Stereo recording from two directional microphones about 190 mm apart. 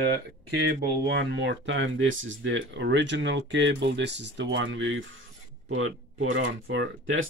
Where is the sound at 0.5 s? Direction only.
65° right (ahead or behind); by 7.2 s 85° right.